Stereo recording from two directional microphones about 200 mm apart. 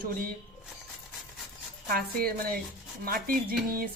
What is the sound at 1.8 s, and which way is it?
Speech, 50° right (ahead or behind).